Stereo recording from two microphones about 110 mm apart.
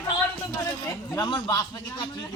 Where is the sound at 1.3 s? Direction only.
40° left (ahead or behind).